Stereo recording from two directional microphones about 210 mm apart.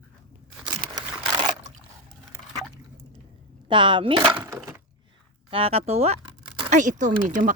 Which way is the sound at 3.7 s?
25° right (ahead or behind).